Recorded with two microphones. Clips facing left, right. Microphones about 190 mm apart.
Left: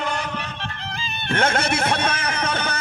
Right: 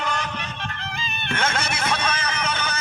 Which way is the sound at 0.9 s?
35° left (ahead or behind).